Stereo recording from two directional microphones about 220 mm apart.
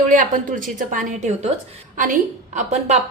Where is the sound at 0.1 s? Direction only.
35° right (ahead or behind).